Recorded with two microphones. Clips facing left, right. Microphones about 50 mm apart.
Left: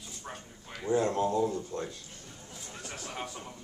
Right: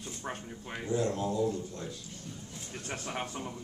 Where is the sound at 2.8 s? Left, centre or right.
Right.